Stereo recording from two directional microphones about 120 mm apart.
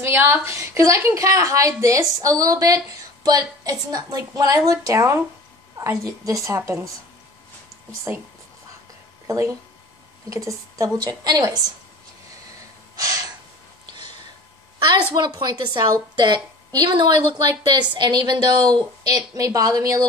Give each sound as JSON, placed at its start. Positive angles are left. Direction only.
{"t": 0.0, "sound": "a woman's voice", "side_deg": -15}
{"t": 8.1, "sound": "speech", "side_deg": -15}
{"t": 9.3, "sound": "a woman's voice", "side_deg": -25}
{"t": 12.9, "sound": "gasp", "side_deg": -30}
{"t": 15.1, "sound": "a woman's voice", "side_deg": -40}